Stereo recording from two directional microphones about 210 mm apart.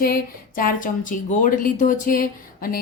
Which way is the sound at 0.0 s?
45° left (ahead or behind).